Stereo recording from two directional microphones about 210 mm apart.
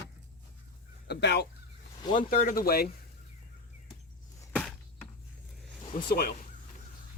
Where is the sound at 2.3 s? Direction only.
40° left (ahead or behind).